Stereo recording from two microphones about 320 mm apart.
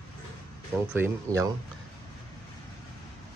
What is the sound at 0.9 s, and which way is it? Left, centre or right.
Speech, centre.